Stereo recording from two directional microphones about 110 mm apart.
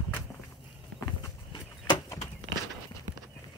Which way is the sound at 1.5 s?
40° left (ahead or behind).